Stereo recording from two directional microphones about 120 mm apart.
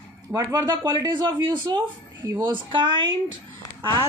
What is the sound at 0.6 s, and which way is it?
Speech, 35° right (ahead or behind).